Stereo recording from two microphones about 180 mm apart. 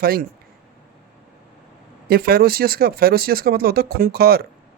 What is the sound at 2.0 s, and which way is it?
Speech, 60° right (ahead or behind).